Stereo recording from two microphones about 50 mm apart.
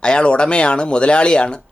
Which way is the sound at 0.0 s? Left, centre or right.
Centre.